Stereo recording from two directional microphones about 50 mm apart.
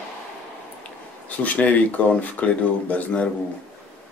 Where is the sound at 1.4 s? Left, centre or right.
Left.